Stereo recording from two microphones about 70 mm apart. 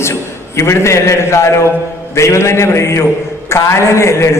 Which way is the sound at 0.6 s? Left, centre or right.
Left.